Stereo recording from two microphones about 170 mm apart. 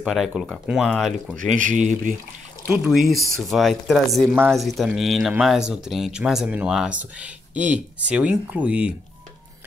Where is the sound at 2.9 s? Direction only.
Centre (ahead or behind).